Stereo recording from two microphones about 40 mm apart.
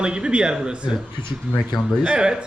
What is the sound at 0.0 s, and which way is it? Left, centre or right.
Speech, right.